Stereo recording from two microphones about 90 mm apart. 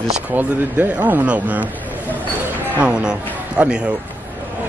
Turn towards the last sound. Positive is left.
turn(degrees=-10)  # may be behind; listen again after turning